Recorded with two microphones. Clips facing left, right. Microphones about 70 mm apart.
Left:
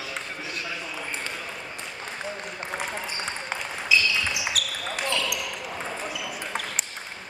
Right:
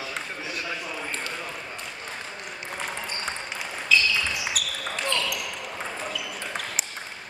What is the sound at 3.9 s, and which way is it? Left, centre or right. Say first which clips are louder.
Basketball bounce: right 1 dB; centre.